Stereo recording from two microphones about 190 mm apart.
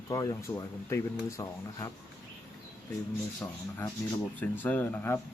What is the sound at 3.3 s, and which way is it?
Speech, 10° left (ahead or behind).